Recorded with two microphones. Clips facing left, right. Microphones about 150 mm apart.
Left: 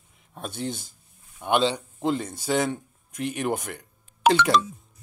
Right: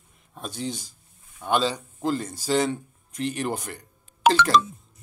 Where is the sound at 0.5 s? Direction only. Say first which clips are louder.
Even; 55° left (ahead or behind).